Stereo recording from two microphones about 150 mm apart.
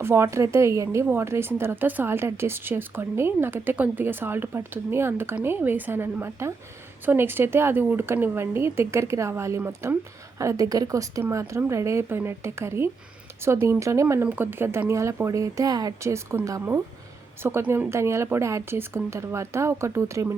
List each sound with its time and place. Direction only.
0.0 s speech: 15° right (ahead or behind)